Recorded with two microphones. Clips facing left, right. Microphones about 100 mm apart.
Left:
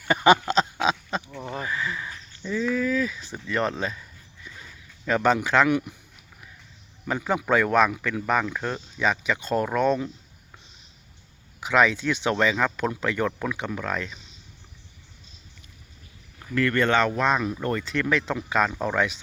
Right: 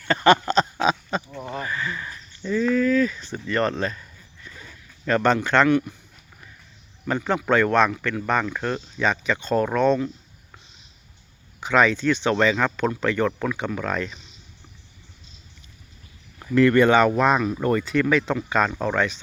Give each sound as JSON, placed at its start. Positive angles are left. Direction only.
{"t": 0.1, "sound": "a sound", "side_deg": 10}
{"t": 0.5, "sound": "a sound", "side_deg": 0}
{"t": 5.0, "sound": "speech", "side_deg": 5}
{"t": 7.1, "sound": "speech", "side_deg": 5}
{"t": 11.6, "sound": "speech", "side_deg": 5}
{"t": 16.6, "sound": "speech", "side_deg": -15}